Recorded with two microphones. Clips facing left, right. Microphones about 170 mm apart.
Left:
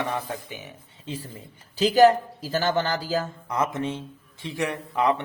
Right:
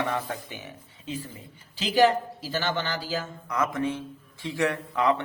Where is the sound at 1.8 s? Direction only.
40° left (ahead or behind).